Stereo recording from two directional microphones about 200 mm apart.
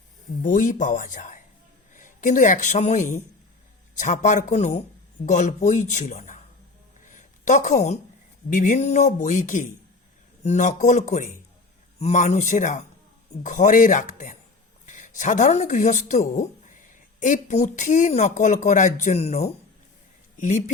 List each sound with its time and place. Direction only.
0.4 s speech: 40° left (ahead or behind)
7.1 s a sound: 40° left (ahead or behind)
8.4 s speech: 40° left (ahead or behind)